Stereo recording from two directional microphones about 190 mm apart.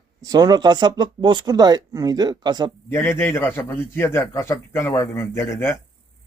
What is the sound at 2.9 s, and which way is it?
A man's voice, 15° left (ahead or behind).